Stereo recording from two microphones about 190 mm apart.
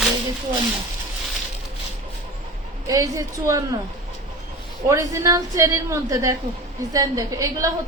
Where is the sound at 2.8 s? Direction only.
20° right (ahead or behind).